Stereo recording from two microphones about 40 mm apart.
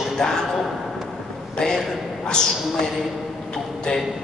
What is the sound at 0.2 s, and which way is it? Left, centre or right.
Speech, centre.